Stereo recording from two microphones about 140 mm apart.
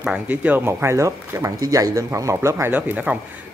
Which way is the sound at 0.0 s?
10° right (ahead or behind).